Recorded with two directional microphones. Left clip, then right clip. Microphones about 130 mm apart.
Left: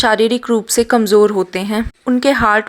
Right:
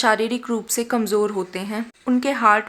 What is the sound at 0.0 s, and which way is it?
A woman's voice, 50° left (ahead or behind).